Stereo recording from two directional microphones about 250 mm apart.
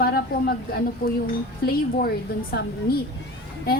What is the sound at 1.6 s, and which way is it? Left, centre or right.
Speech, left.